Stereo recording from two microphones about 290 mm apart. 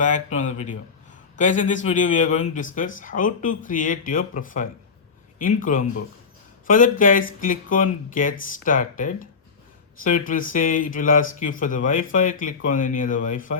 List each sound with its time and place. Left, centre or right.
0.0 s speech: left